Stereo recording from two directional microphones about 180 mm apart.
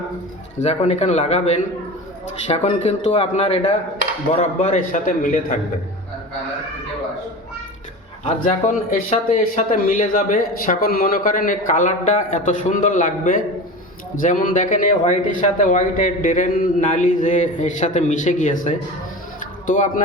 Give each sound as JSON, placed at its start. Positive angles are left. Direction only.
{"t": 0.6, "sound": "speech", "side_deg": 35}
{"t": 8.2, "sound": "speech", "side_deg": 40}
{"t": 19.4, "sound": "music", "side_deg": 45}